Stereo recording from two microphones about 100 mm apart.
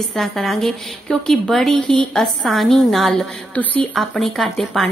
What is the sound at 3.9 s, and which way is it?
Speech, centre (ahead or behind).